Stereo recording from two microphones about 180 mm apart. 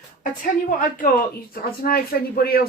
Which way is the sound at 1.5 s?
55° left (ahead or behind).